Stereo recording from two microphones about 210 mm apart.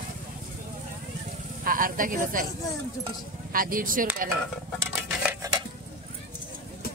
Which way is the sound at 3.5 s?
40° right (ahead or behind).